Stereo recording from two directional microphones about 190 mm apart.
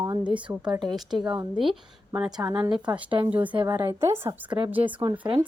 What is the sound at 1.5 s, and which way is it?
A woman's voice, 5° right (ahead or behind).